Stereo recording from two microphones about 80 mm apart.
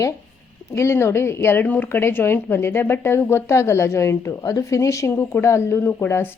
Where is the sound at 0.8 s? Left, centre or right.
Left.